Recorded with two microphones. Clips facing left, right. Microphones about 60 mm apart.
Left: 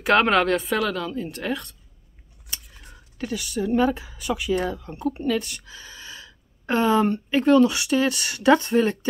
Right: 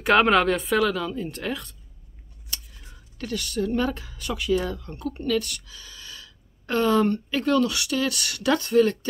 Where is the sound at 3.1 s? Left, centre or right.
Centre.